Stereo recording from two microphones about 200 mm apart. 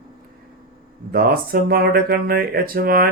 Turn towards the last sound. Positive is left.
turn(degrees=-50)  # may be behind; listen again after turning